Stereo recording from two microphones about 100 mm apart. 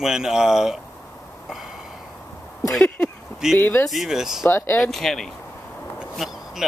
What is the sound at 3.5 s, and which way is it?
Speech, 25° left (ahead or behind).